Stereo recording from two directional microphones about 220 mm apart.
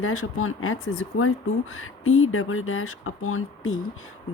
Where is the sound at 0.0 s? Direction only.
70° left (ahead or behind).